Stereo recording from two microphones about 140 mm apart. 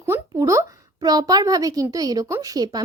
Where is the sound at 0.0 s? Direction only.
20° right (ahead or behind).